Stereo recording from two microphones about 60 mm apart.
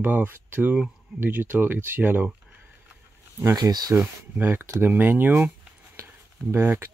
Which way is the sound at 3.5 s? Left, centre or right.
Right.